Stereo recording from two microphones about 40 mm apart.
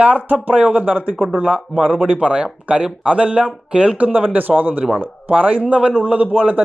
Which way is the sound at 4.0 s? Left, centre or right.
Right.